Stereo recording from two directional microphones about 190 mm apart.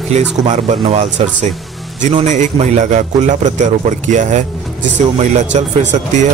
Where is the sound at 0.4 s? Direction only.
35° right (ahead or behind).